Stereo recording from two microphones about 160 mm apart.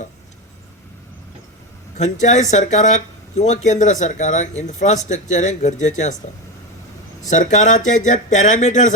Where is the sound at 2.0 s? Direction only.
50° left (ahead or behind).